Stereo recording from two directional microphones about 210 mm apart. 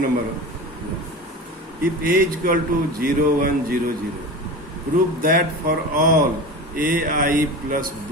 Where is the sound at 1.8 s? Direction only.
45° right (ahead or behind).